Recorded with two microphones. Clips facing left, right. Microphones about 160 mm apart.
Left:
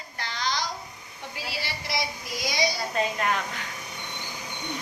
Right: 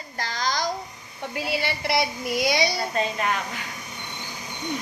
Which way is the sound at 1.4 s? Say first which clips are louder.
Right 9 dB; 60° right (ahead or behind).